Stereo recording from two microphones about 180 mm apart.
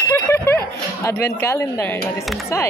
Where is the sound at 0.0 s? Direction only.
15° left (ahead or behind).